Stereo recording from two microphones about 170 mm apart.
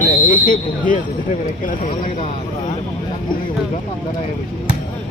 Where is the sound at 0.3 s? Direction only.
55° left (ahead or behind).